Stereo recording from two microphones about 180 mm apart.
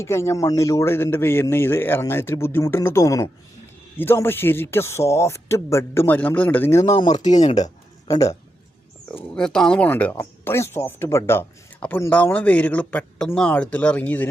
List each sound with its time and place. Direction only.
0.0 s speech: 15° left (ahead or behind)
6.9 s speech: 25° left (ahead or behind)
7.3 s speech: 40° left (ahead or behind)
8.0 s a man's voice: 20° left (ahead or behind)
9.0 s speech: 5° left (ahead or behind)